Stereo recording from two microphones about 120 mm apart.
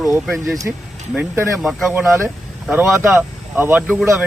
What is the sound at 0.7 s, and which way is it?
Speech, 15° right (ahead or behind).